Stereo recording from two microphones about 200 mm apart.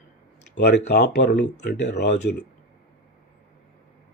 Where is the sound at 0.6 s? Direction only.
55° left (ahead or behind).